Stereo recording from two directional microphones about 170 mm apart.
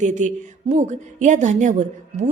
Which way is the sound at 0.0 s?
45° right (ahead or behind).